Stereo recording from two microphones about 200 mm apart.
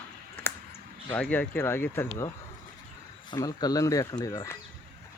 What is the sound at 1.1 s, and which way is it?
Speech, 10° left (ahead or behind).